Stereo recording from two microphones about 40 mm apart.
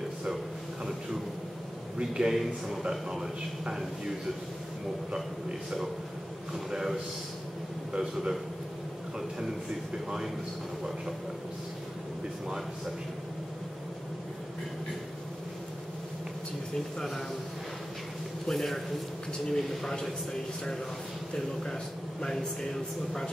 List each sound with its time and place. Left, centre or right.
2.0 s a man's voice: right
2.3 s a man's voice: centre
6.7 s a man's voice: centre
8.1 s a man's voice: centre
18.5 s speech: centre
22.2 s speech: centre